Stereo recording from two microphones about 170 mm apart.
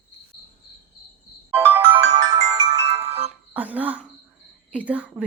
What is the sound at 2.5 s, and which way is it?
Music, 20° right (ahead or behind).